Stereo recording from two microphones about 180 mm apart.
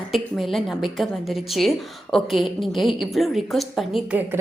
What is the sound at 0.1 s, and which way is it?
A woman's voice, centre (ahead or behind).